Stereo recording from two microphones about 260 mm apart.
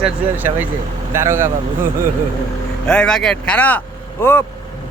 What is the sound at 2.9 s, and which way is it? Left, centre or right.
Speech, centre.